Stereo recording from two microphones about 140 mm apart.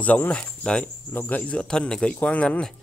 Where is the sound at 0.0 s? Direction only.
10° left (ahead or behind).